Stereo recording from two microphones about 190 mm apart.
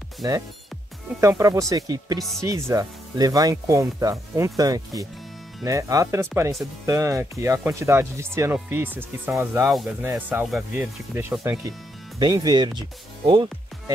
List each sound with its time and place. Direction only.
1.2 s speech: 15° right (ahead or behind)
9.7 s speech: centre (ahead or behind); by 13.5 s 25° right (ahead or behind)